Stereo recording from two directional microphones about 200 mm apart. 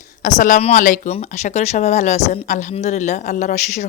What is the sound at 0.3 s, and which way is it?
Speech, 40° left (ahead or behind).